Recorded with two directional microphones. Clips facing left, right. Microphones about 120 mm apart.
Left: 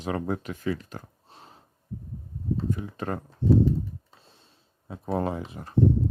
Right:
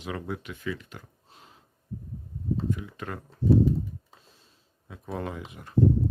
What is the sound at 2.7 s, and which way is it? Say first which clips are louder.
Speech: left 3 dB; 35° left (ahead or behind).